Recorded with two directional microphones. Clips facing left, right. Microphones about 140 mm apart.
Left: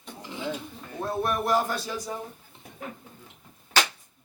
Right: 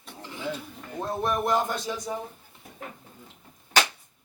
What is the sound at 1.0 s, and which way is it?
Speech, 20° right (ahead or behind).